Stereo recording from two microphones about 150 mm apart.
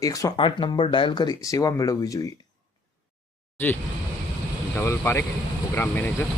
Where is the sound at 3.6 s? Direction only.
15° left (ahead or behind).